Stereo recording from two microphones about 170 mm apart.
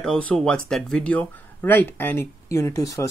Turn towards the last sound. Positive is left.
turn(degrees=20)  # may be behind; listen again after turning